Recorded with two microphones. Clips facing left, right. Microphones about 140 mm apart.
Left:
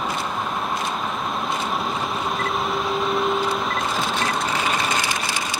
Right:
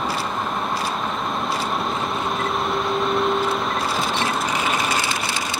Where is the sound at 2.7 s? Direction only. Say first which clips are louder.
Right 2 dB; centre (ahead or behind).